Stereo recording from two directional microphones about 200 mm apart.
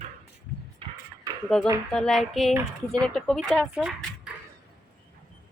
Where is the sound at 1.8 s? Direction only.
5° left (ahead or behind).